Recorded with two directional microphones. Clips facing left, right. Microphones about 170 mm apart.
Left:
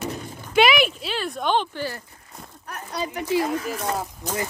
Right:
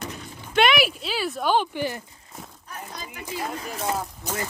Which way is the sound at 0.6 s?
Centre (ahead or behind).